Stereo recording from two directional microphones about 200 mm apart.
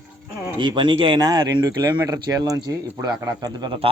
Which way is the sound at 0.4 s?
20° right (ahead or behind).